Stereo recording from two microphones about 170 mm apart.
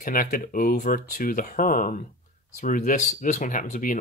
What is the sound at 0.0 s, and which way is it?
Speech, 50° left (ahead or behind).